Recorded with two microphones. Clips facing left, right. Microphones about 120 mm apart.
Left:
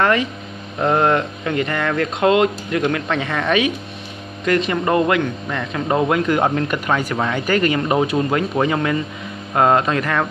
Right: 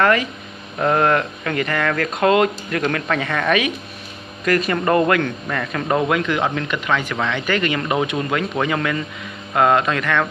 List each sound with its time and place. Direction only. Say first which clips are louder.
0.0 s a man's voice: even; 30° left (ahead or behind)